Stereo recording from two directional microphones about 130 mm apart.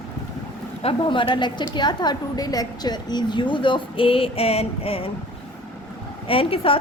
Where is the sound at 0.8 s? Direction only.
40° left (ahead or behind).